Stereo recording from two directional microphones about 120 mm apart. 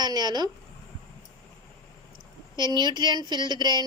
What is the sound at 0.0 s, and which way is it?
Speech, 35° right (ahead or behind).